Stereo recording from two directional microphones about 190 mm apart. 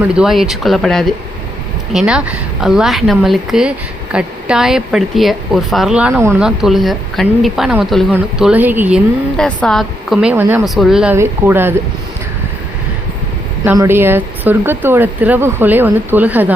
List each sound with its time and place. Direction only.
0.0 s a woman's voice: 5° right (ahead or behind)
9.4 s a woman's voice: 5° left (ahead or behind)
13.7 s speech: 10° right (ahead or behind)